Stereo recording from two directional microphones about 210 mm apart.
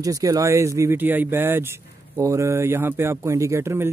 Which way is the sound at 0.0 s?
15° right (ahead or behind).